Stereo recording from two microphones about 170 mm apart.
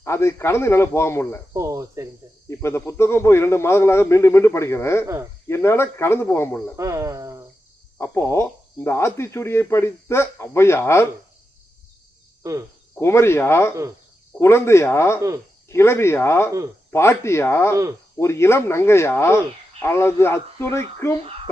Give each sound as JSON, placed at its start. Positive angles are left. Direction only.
{"t": 0.0, "sound": "speech", "side_deg": 15}
{"t": 1.5, "sound": "speech", "side_deg": -20}
{"t": 2.5, "sound": "speech", "side_deg": 15}
{"t": 5.0, "sound": "speech", "side_deg": -15}
{"t": 5.5, "sound": "speech", "side_deg": 15}
{"t": 6.7, "sound": "speech", "side_deg": -15}
{"t": 7.9, "sound": "speech", "side_deg": 15}
{"t": 12.4, "sound": "cricket", "side_deg": -20}
{"t": 13.0, "sound": "speech", "side_deg": 15}